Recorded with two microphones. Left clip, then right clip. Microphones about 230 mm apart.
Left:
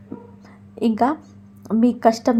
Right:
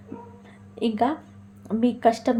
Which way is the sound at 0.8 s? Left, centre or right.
Left.